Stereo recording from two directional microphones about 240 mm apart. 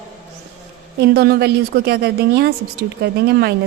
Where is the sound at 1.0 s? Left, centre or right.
Right.